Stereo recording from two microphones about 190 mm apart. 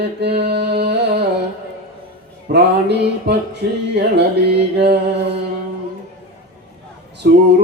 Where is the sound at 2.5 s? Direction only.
65° right (ahead or behind).